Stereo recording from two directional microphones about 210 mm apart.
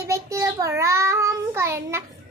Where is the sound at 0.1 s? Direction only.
15° right (ahead or behind).